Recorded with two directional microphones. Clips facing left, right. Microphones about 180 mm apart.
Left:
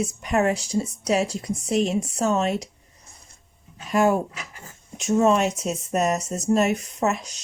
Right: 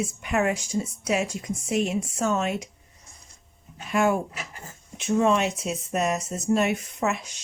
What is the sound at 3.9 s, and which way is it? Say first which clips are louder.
Speech: left 3 dB; 40° left (ahead or behind).